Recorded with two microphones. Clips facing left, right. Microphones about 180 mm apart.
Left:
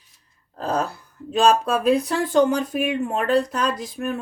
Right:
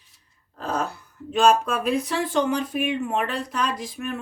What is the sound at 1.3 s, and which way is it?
Speech, 35° left (ahead or behind).